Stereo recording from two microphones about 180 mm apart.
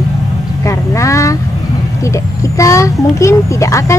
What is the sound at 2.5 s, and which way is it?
Speech, 15° left (ahead or behind).